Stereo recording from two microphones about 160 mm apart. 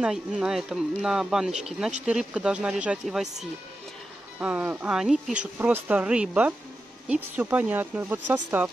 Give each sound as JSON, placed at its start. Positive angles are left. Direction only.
{"t": 0.0, "sound": "speech", "side_deg": -5}
{"t": 4.4, "sound": "speech", "side_deg": -10}